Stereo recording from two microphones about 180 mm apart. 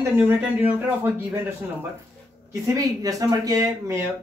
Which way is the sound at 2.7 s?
20° right (ahead or behind).